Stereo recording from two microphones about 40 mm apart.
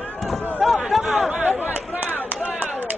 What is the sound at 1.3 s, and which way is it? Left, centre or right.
Chatter, right.